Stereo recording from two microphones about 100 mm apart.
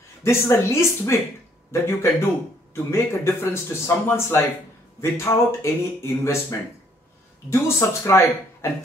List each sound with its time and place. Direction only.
0.2 s a man's voice: 25° left (ahead or behind)
7.4 s a man's voice: 25° left (ahead or behind)